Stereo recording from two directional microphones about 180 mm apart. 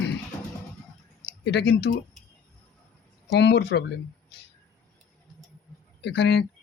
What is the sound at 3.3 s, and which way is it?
Speech, 65° left (ahead or behind).